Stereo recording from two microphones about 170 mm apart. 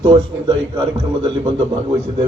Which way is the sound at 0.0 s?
30° right (ahead or behind).